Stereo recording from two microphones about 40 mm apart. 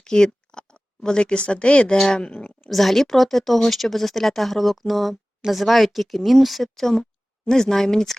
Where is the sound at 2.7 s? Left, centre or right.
Centre.